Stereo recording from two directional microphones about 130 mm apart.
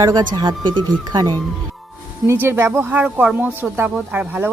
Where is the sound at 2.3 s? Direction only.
20° right (ahead or behind).